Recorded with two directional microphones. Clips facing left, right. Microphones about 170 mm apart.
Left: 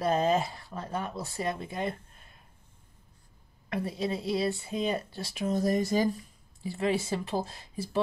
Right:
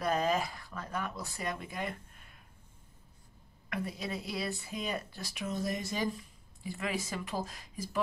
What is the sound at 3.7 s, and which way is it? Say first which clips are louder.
Speech: left 6 dB; 30° left (ahead or behind).